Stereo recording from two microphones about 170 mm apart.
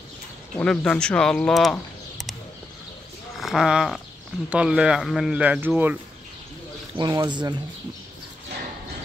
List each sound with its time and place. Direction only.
0.6 s speech: 5° left (ahead or behind)
3.3 s speech: 5° right (ahead or behind)
7.0 s speech: 25° right (ahead or behind)